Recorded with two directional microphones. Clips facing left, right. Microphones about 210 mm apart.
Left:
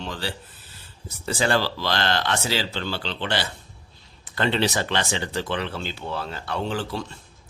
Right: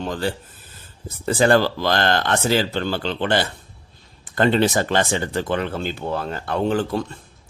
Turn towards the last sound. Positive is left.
turn(degrees=-50)  # may be behind; listen again after turning